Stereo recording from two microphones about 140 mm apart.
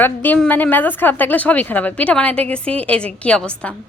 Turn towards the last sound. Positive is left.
turn(degrees=10)  # may be behind; listen again after turning